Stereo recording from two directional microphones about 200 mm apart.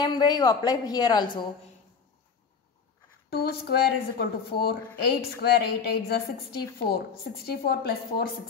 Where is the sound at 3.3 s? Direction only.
50° left (ahead or behind).